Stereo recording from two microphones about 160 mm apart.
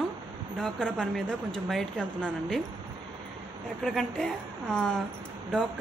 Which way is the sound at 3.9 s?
5° left (ahead or behind).